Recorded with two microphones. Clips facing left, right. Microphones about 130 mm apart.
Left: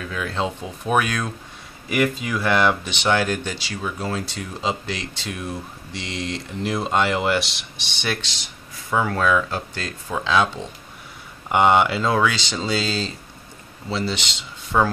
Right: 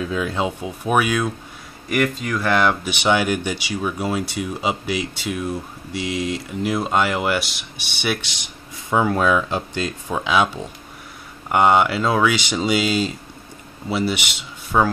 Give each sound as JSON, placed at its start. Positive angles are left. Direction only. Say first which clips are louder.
{"t": 0.0, "sound": "speech", "louder": "right 3 dB", "side_deg": -20}
{"t": 2.9, "sound": "speech", "louder": "right 2 dB", "side_deg": -15}